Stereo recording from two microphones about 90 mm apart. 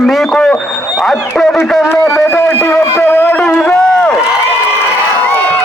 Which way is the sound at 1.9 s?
25° left (ahead or behind).